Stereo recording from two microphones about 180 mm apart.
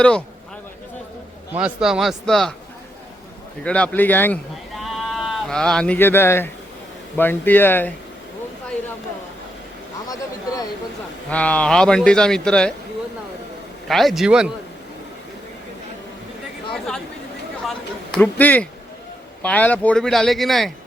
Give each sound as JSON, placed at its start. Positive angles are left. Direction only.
{"t": 1.5, "sound": "a man's voice", "side_deg": -5}
{"t": 3.6, "sound": "speech", "side_deg": 5}
{"t": 4.8, "sound": "sheep", "side_deg": 0}
{"t": 7.2, "sound": "speech", "side_deg": 10}
{"t": 10.1, "sound": "a sound", "side_deg": 20}
{"t": 11.3, "sound": "a man's voice", "side_deg": 5}
{"t": 13.8, "sound": "a man's voice", "side_deg": 0}
{"t": 16.7, "sound": "chatter", "side_deg": 5}
{"t": 17.7, "sound": "a sound", "side_deg": 5}
{"t": 19.4, "sound": "a man's voice", "side_deg": 10}